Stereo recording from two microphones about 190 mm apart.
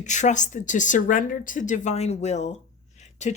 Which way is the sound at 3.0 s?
35° left (ahead or behind).